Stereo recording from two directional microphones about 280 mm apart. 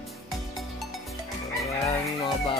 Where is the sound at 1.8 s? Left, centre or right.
Centre.